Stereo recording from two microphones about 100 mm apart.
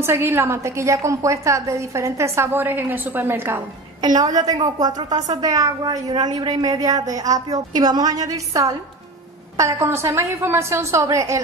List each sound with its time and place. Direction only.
0.0 s a woman's voice: 25° right (ahead or behind)
4.0 s a woman's voice: 40° right (ahead or behind)